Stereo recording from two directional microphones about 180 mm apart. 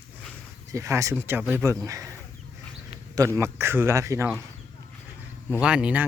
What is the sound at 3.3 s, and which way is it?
Speech, 15° right (ahead or behind).